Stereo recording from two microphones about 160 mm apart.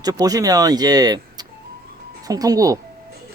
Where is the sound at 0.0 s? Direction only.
25° right (ahead or behind).